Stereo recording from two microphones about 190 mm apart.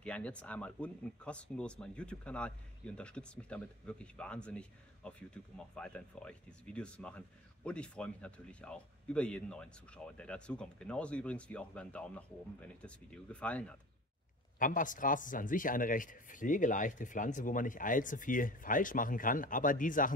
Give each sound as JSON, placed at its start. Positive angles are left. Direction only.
{"t": 0.0, "sound": "speech", "side_deg": 5}
{"t": 14.6, "sound": "a man's voice", "side_deg": 45}